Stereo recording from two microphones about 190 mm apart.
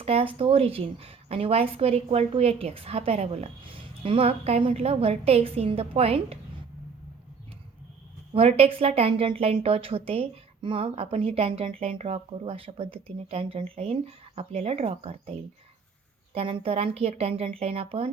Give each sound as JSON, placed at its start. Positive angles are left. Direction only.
{"t": 0.0, "sound": "a woman's voice", "side_deg": -30}
{"t": 8.3, "sound": "a woman's voice", "side_deg": -35}